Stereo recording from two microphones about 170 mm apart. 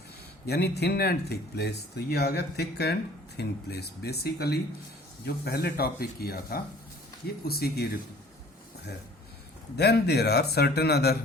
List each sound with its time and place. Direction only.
0.4 s speech: 70° left (ahead or behind)
9.7 s speech: 70° left (ahead or behind)